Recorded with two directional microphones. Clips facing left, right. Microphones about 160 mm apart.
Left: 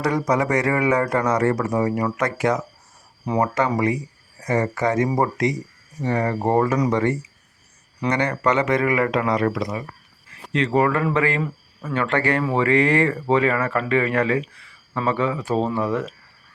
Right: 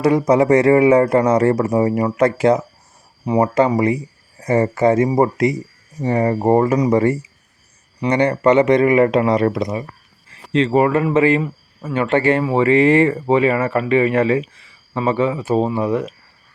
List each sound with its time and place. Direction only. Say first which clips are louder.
0.0 s speech: right 7 dB; 25° right (ahead or behind)